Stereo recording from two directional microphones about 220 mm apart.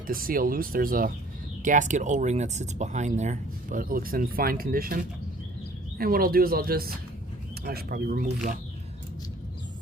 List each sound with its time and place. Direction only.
0.1 s speech: 40° right (ahead or behind)